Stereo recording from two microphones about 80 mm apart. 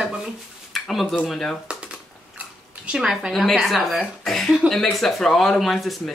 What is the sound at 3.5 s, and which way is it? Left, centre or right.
Speech, centre.